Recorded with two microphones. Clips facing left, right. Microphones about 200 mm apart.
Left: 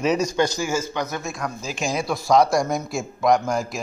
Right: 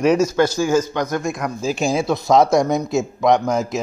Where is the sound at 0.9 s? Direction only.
10° left (ahead or behind).